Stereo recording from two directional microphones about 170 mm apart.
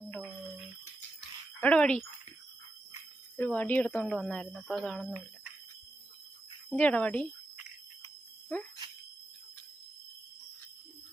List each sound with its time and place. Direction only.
1.2 s dog: 5° left (ahead or behind)
3.3 s speech: 10° left (ahead or behind)
6.7 s speech: 5° left (ahead or behind)
8.5 s speech: 10° left (ahead or behind)